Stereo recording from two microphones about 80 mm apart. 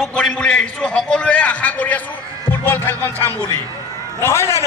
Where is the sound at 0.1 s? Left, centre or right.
Centre.